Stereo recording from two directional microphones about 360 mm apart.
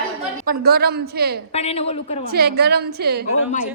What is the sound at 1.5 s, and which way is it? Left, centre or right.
Speech, centre.